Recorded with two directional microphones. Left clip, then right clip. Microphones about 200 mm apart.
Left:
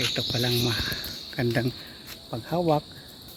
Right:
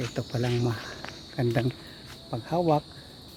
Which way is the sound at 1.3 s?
5° right (ahead or behind).